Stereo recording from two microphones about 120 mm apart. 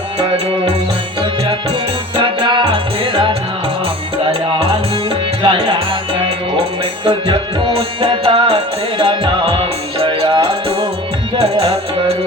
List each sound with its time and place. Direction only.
0.2 s music: 55° right (ahead or behind)
2.1 s music: 45° right (ahead or behind)
7.0 s music: 45° right (ahead or behind)